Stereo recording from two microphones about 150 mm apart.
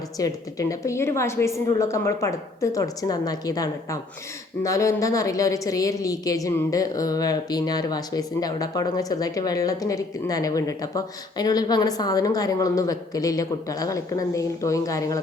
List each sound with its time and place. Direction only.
0.2 s a woman's voice: 20° left (ahead or behind)